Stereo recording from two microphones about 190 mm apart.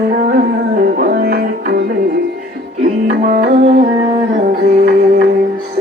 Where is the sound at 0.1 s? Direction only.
40° right (ahead or behind).